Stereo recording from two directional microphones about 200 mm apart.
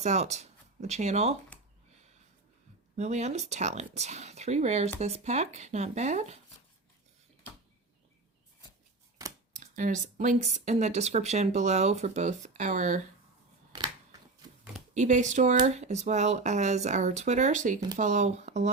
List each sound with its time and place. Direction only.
0.0 s speech: 35° right (ahead or behind)
2.9 s speech: 35° right (ahead or behind)
9.2 s scissors: 15° right (ahead or behind)
9.6 s speech: 40° right (ahead or behind)
14.9 s speech: 35° right (ahead or behind)